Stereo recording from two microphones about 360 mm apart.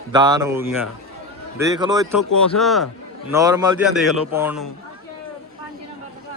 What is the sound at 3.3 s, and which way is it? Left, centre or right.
A man's voice, centre.